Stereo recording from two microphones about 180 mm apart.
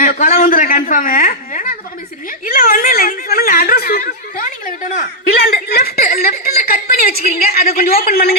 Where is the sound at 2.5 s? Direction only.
55° left (ahead or behind).